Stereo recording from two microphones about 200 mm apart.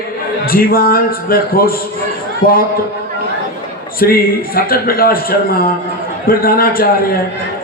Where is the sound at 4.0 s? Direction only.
45° left (ahead or behind).